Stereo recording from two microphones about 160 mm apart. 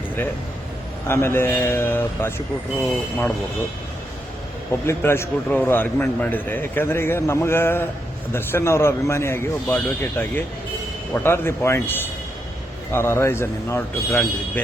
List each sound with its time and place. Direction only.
1.0 s a man's voice: 15° left (ahead or behind)
4.9 s a man's voice: 15° left (ahead or behind)